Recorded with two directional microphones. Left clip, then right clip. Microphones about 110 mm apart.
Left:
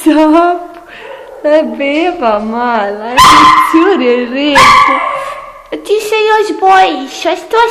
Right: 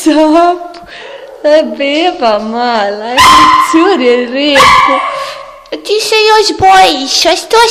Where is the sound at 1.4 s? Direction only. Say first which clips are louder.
Right 2 dB; 20° right (ahead or behind).